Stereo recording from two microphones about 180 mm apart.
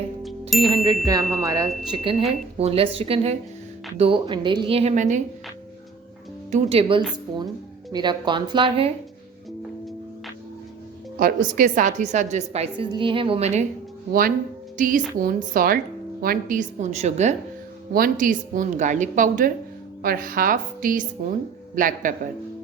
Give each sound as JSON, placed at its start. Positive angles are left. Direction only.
{"t": 0.2, "sound": "music", "side_deg": 0}
{"t": 0.9, "sound": "speech", "side_deg": -20}
{"t": 2.6, "sound": "a woman's voice", "side_deg": -35}
{"t": 6.5, "sound": "a woman's voice", "side_deg": -35}
{"t": 11.2, "sound": "a woman's voice", "side_deg": -55}
{"t": 14.1, "sound": "a woman's voice", "side_deg": -55}
{"t": 17.9, "sound": "a woman's voice", "side_deg": -50}